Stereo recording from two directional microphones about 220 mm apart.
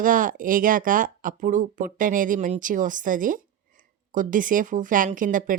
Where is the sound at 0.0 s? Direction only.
40° right (ahead or behind).